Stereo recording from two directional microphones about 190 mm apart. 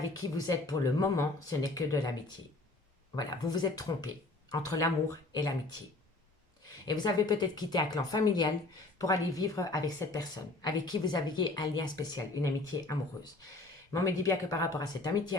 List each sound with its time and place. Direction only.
0.2 s a woman's voice: 20° left (ahead or behind)
6.8 s a woman's voice: 20° left (ahead or behind)